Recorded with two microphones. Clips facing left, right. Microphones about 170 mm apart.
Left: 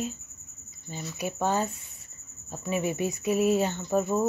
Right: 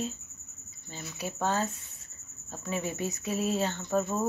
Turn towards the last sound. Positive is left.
turn(degrees=10)  # may be behind; listen again after turning